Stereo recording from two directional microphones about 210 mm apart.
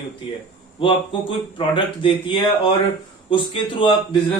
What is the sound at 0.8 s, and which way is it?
A man's voice, 25° left (ahead or behind).